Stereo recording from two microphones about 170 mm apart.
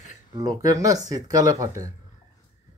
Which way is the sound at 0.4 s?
20° right (ahead or behind).